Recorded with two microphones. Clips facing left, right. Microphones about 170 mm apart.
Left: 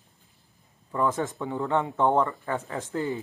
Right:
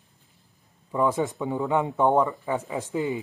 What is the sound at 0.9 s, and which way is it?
Speech, 15° right (ahead or behind).